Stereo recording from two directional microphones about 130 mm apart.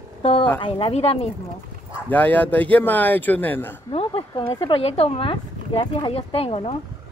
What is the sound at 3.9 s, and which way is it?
Speech, 45° left (ahead or behind).